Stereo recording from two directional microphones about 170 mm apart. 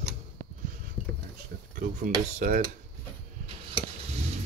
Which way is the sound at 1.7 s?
45° right (ahead or behind).